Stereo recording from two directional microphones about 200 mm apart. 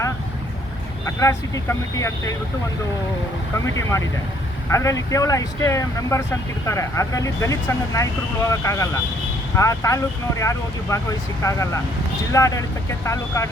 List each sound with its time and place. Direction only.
1.0 s speech: 15° left (ahead or behind)
3.5 s speech: 15° left (ahead or behind)